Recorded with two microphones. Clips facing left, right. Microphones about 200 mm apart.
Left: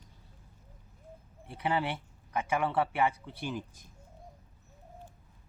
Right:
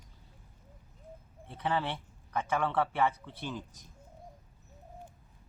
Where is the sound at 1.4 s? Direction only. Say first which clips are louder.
Left 1 dB; 10° left (ahead or behind).